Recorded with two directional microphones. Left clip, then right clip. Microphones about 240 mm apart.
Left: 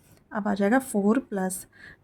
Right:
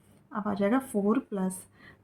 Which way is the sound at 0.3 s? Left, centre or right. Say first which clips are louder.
Left 4 dB; left.